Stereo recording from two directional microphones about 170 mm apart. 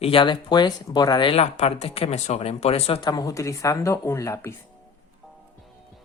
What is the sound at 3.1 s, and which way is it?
Speech, 20° left (ahead or behind).